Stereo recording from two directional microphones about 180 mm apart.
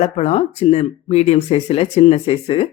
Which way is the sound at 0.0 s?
35° left (ahead or behind).